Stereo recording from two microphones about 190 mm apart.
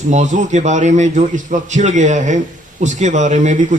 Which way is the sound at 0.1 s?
40° right (ahead or behind).